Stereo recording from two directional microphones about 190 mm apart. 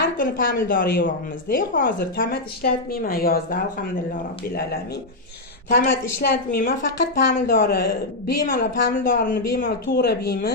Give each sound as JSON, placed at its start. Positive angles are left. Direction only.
{"t": 0.2, "sound": "a woman's voice", "side_deg": 45}
{"t": 5.9, "sound": "a woman's voice", "side_deg": 55}